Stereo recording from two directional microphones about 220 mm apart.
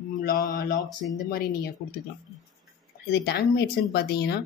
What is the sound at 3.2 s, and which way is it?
Speech, 45° left (ahead or behind).